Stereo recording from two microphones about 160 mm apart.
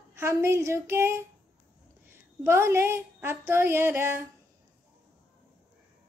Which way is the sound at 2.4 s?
15° right (ahead or behind).